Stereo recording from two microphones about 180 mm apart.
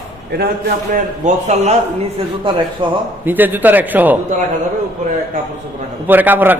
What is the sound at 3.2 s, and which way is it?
Speech, 10° right (ahead or behind).